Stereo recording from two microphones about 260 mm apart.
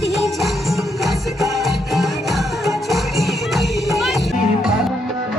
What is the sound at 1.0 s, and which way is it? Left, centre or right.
Music, centre.